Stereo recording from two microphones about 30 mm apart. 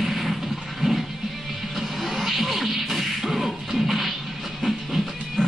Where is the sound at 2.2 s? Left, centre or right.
Centre.